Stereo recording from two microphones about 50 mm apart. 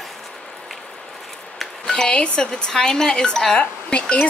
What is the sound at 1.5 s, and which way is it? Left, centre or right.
Speech, centre.